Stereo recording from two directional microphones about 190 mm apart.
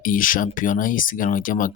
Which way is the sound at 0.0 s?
45° left (ahead or behind).